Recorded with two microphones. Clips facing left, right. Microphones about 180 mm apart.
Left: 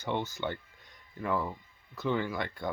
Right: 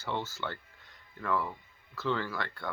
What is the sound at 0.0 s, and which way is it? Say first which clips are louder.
Speech: left 3 dB; 15° left (ahead or behind).